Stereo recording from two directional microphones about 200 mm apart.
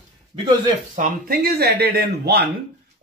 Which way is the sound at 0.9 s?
45° right (ahead or behind).